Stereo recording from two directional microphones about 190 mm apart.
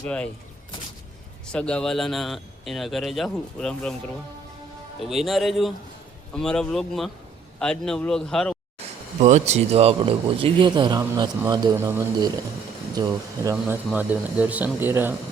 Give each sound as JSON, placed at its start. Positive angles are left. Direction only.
{"t": 0.0, "sound": "speech", "side_deg": 5}
{"t": 1.5, "sound": "a man's voice", "side_deg": 5}
{"t": 4.9, "sound": "a man's voice", "side_deg": 0}
{"t": 9.2, "sound": "a man's voice", "side_deg": -35}